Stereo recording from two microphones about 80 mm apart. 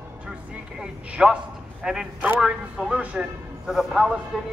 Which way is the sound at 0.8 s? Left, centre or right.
Centre.